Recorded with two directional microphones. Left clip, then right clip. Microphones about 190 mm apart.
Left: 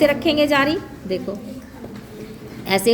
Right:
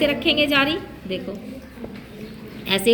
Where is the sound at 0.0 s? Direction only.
35° left (ahead or behind).